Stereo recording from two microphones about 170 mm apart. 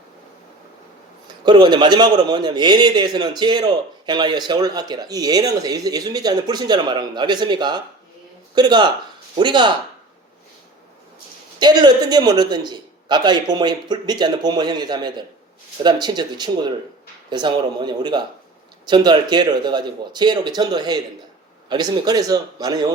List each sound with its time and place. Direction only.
1.5 s a man's voice: 25° right (ahead or behind)
11.6 s a man's voice: 25° right (ahead or behind)